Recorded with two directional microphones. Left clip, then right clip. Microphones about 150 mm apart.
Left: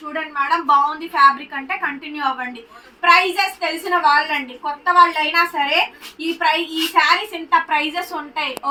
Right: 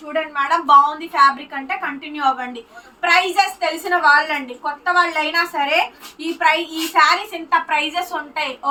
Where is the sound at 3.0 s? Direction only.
15° right (ahead or behind).